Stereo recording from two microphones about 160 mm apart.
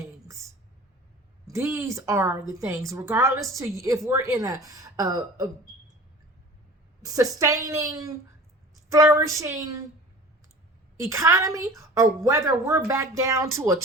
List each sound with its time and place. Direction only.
1.5 s a woman's voice: 15° right (ahead or behind)
7.0 s a woman's voice: 20° right (ahead or behind)
11.0 s a woman's voice: 20° right (ahead or behind)